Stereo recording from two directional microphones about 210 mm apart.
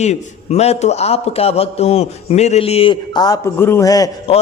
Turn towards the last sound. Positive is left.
turn(degrees=15)  # may be behind; listen again after turning